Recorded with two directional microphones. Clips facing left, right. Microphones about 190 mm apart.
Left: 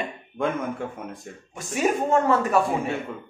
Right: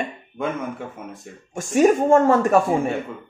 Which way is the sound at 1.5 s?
45° right (ahead or behind).